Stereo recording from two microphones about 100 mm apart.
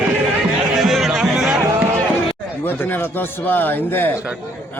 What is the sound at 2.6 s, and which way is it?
A man's voice, 20° left (ahead or behind).